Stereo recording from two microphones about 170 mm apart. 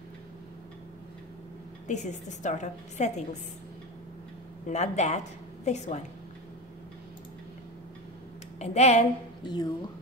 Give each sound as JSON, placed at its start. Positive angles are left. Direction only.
{"t": 1.9, "sound": "a woman's voice", "side_deg": 45}
{"t": 4.6, "sound": "a woman's voice", "side_deg": 45}
{"t": 8.5, "sound": "speech", "side_deg": 40}
{"t": 9.4, "sound": "speech", "side_deg": 25}